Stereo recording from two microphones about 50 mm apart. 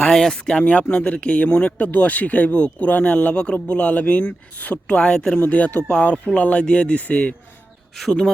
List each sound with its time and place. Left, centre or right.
0.1 s speech: centre
0.6 s speech: left